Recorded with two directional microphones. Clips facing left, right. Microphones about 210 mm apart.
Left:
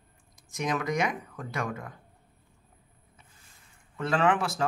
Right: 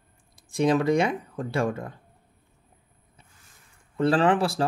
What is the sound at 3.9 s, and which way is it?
Speech, 35° right (ahead or behind).